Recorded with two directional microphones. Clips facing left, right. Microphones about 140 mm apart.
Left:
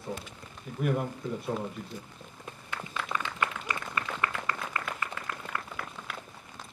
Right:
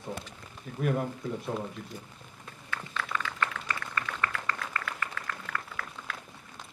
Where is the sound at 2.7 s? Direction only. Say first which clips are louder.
Even; 15° left (ahead or behind).